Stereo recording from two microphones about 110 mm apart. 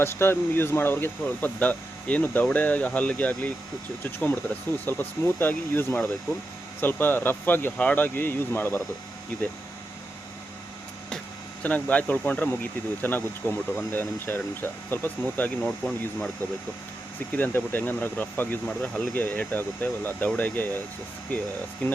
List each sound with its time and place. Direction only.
0.0 s speech: 20° left (ahead or behind)
11.6 s speech: 10° left (ahead or behind)
15.8 s speech: centre (ahead or behind)
17.3 s speech: 20° left (ahead or behind)
18.7 s speech: 5° left (ahead or behind)
19.1 s speech: 15° left (ahead or behind)